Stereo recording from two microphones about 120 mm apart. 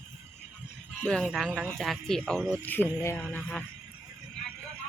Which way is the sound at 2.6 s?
15° left (ahead or behind).